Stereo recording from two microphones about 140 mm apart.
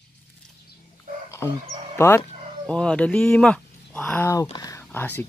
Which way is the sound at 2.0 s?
20° left (ahead or behind).